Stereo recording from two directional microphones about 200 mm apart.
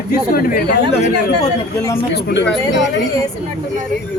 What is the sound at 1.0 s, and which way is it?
Speech, 35° left (ahead or behind).